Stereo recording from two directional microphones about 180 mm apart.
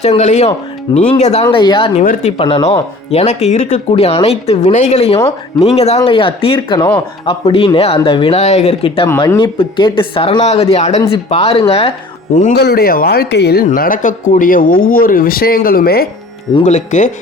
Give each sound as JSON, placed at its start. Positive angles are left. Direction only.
{"t": 0.0, "sound": "speech", "side_deg": 40}
{"t": 1.5, "sound": "speech", "side_deg": 25}
{"t": 2.0, "sound": "speech", "side_deg": 40}
{"t": 9.0, "sound": "speech", "side_deg": 15}
{"t": 9.4, "sound": "speech", "side_deg": 25}
{"t": 12.5, "sound": "speech", "side_deg": 60}
{"t": 13.7, "sound": "speech", "side_deg": 50}
{"t": 16.6, "sound": "speech", "side_deg": 40}